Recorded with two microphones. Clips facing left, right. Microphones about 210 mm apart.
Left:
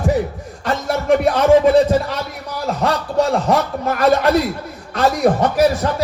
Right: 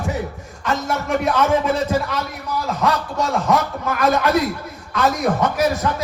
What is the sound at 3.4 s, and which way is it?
A man's voice, 35° left (ahead or behind).